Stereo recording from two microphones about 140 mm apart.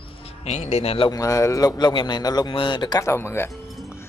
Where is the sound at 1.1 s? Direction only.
25° left (ahead or behind).